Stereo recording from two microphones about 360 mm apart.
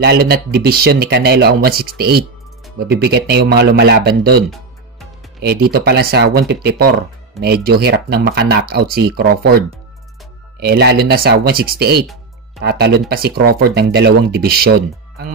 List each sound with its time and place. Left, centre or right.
0.0 s speech: right